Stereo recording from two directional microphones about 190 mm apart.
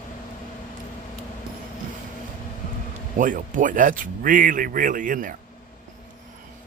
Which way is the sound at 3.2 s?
45° right (ahead or behind).